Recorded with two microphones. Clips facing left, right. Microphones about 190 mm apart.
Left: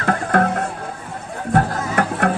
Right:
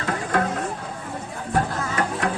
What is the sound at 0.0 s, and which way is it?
Music, 60° left (ahead or behind).